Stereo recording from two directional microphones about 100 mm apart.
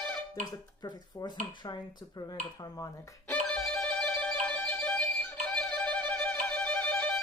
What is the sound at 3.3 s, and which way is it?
Music, 10° left (ahead or behind).